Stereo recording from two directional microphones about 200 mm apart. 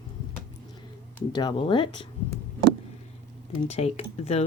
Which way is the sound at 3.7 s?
30° left (ahead or behind).